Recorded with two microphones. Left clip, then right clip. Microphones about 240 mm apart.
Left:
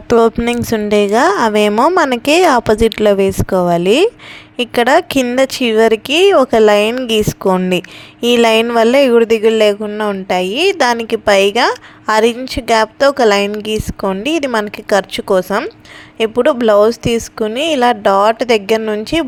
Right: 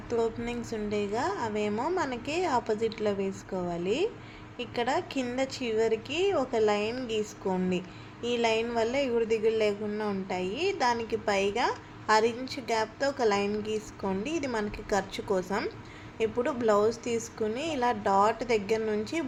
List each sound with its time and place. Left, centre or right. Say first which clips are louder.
0.1 s a woman's voice: left 19 dB; left